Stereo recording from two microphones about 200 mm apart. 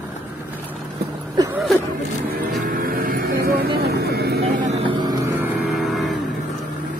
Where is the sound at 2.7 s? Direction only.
45° right (ahead or behind).